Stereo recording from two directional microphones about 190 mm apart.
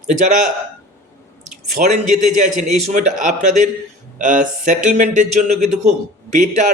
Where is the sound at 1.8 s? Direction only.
45° right (ahead or behind).